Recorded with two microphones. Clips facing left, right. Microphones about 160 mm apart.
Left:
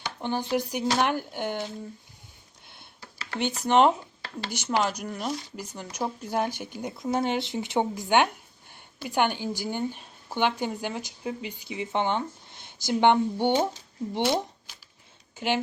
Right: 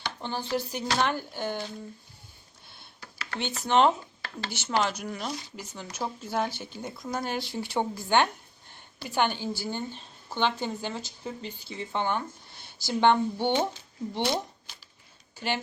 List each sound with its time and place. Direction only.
0.0 s a woman's voice: 15° left (ahead or behind)
2.7 s a sound: 20° left (ahead or behind)
3.7 s a woman's voice: 10° left (ahead or behind)
5.7 s a woman's voice: 15° left (ahead or behind)